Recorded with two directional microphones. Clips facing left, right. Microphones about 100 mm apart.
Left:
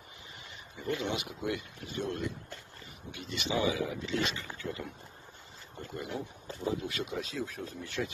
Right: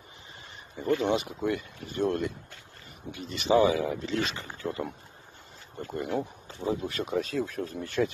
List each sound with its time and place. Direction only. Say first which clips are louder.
0.4 s speech: right 7 dB; 40° right (ahead or behind)
3.1 s speech: right 10 dB; 40° right (ahead or behind)
5.9 s speech: right 7 dB; 50° right (ahead or behind)